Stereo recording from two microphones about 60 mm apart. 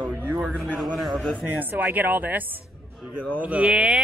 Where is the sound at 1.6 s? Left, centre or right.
Right.